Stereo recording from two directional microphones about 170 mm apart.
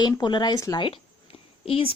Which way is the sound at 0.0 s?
25° left (ahead or behind).